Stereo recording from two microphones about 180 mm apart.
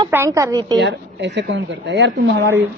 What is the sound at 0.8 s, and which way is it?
Speech, 80° right.